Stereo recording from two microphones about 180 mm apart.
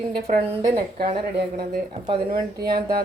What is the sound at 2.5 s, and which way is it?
Speech, 60° right (ahead or behind).